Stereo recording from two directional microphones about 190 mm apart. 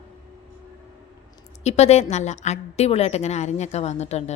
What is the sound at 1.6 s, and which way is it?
A woman's voice, 35° left (ahead or behind).